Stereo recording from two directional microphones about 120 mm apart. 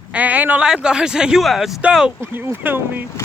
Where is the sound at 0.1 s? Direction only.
10° right (ahead or behind).